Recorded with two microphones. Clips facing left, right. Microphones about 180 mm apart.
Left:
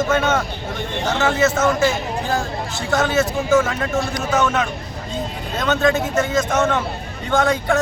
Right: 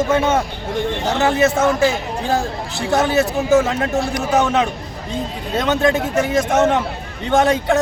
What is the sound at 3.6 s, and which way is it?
A man's voice, 20° right (ahead or behind).